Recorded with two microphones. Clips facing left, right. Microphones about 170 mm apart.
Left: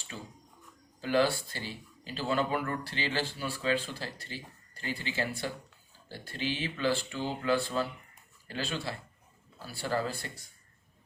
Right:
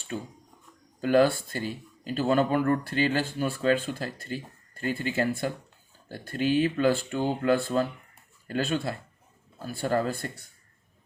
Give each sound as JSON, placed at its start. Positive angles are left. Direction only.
{"t": 1.0, "sound": "speech", "side_deg": -50}